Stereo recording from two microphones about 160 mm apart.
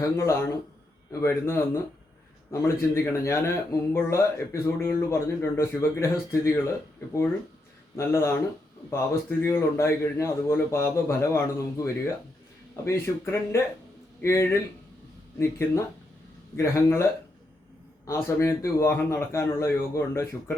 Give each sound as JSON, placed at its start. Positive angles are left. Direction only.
{"t": 0.0, "sound": "speech", "side_deg": 20}
{"t": 7.9, "sound": "speech", "side_deg": 15}